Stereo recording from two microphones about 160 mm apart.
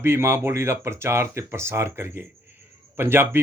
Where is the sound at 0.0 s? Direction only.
15° right (ahead or behind).